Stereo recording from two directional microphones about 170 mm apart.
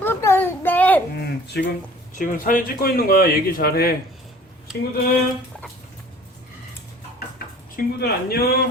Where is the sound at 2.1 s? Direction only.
55° left (ahead or behind).